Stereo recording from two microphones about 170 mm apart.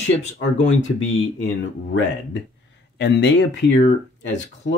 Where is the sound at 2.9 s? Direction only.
90° left.